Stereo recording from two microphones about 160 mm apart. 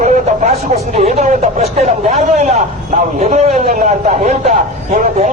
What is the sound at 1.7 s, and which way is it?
A man's voice, 45° right (ahead or behind).